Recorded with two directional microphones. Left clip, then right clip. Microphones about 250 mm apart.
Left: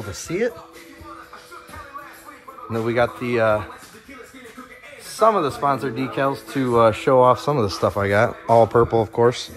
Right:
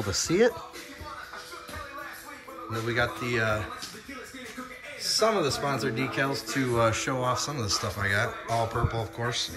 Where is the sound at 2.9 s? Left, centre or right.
Left.